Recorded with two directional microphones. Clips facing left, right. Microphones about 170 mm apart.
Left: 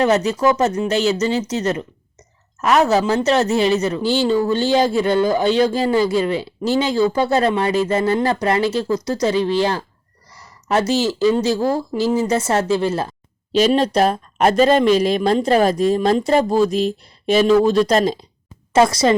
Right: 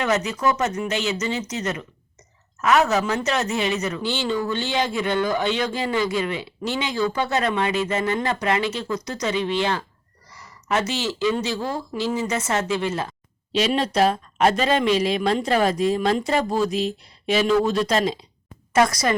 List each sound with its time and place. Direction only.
0.0 s speech: 35° left (ahead or behind)
18.7 s speech: 25° left (ahead or behind)